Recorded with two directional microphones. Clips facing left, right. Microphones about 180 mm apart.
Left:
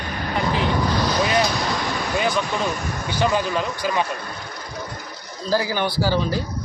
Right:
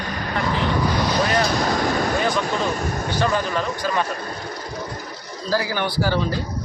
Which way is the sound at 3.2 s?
15° left (ahead or behind).